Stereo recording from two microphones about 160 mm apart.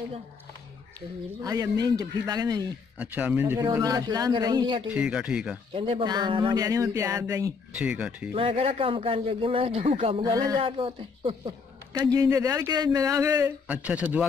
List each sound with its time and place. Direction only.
0.9 s speech: 20° right (ahead or behind)
3.0 s speech: 10° right (ahead or behind)
3.7 s speech: 25° right (ahead or behind)
4.9 s speech: 5° right (ahead or behind)
5.8 s speech: 35° right (ahead or behind)
7.7 s speech: 5° right (ahead or behind)
8.4 s a man's voice: 40° right (ahead or behind)
12.0 s speech: 20° right (ahead or behind)